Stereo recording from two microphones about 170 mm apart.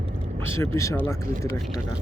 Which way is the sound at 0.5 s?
15° left (ahead or behind).